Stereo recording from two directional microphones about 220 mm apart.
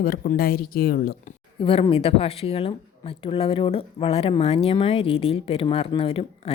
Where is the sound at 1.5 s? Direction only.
25° left (ahead or behind).